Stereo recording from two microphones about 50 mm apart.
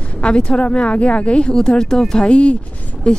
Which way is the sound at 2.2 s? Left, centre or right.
Left.